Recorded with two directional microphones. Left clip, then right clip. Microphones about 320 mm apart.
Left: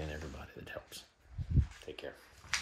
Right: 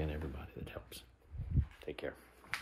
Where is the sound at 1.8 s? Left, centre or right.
Centre.